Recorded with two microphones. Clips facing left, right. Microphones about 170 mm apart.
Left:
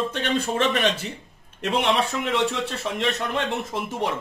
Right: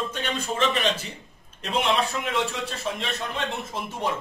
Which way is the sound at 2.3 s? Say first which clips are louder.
Left 4 dB; 75° left (ahead or behind).